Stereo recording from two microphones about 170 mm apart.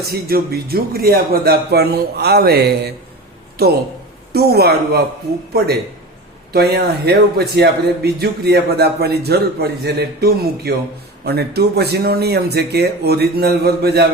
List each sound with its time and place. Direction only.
0.0 s a man's voice: 65° right (ahead or behind)
6.5 s a man's voice: 70° right (ahead or behind)